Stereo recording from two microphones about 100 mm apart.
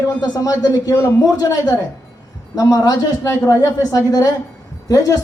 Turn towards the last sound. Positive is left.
turn(degrees=35)  # may be behind; listen again after turning